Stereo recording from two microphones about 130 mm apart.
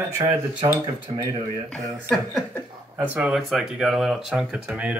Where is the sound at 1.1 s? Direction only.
50° right (ahead or behind).